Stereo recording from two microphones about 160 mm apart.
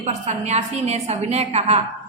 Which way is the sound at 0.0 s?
45° right (ahead or behind).